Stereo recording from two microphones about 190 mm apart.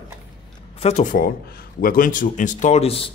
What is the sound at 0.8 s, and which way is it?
Speech, 35° left (ahead or behind).